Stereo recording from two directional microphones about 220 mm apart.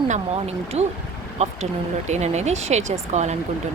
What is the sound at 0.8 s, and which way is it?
Speech, 30° right (ahead or behind).